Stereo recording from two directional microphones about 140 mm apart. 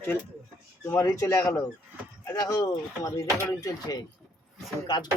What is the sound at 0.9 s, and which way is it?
Speech, 20° left (ahead or behind).